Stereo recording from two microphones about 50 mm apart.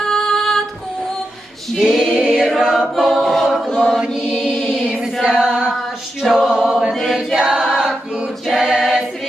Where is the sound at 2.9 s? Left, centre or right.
Centre.